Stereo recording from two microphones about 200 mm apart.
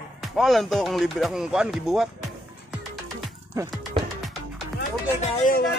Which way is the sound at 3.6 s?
15° right (ahead or behind).